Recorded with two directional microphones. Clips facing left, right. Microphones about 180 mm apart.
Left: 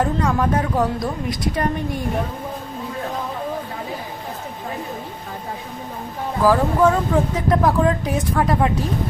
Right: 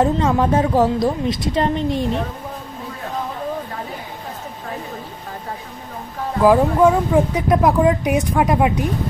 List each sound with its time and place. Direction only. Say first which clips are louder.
0.0 s a woman's voice: right 3 dB; 25° right (ahead or behind)
6.4 s speech: right 3 dB; 20° right (ahead or behind)